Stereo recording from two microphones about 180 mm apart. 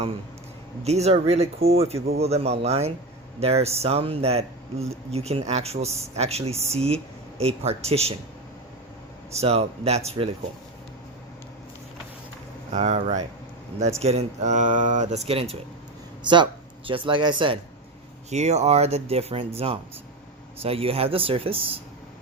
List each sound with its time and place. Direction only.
0.9 s speech: 35° right (ahead or behind)
9.3 s speech: 35° right (ahead or behind)
12.7 s speech: 40° right (ahead or behind)
18.3 s speech: 40° right (ahead or behind)